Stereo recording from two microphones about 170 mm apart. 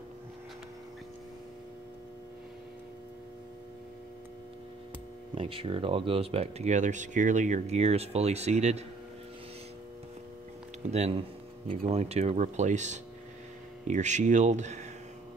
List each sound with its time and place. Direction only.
5.3 s speech: 30° right (ahead or behind)
10.9 s speech: 40° right (ahead or behind)